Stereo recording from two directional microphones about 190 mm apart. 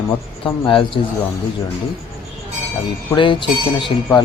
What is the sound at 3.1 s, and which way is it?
Speech, 25° left (ahead or behind).